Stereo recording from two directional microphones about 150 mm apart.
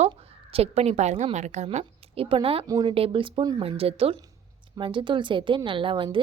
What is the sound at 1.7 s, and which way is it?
Speech, 40° right (ahead or behind).